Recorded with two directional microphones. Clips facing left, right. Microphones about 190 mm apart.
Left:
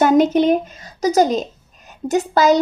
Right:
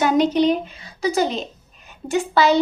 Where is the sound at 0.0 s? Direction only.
50° left (ahead or behind).